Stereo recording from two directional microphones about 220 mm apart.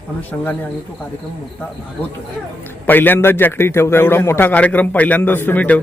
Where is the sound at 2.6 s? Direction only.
10° left (ahead or behind).